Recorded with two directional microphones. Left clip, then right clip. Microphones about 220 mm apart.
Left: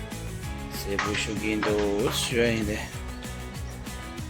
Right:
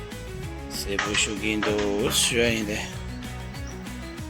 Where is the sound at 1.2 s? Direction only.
5° right (ahead or behind).